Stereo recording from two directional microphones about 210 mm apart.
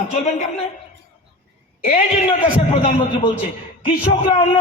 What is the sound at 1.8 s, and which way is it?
A man's voice, 35° left (ahead or behind).